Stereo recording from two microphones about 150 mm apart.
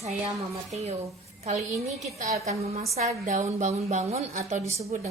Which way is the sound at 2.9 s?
55° right (ahead or behind).